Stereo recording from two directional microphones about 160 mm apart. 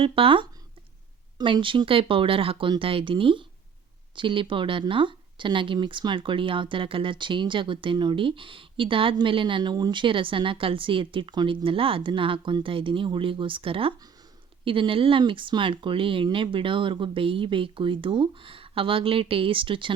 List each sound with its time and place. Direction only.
0.0 s speech: 35° right (ahead or behind)